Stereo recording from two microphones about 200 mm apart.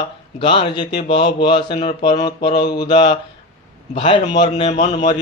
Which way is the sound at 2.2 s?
20° left (ahead or behind).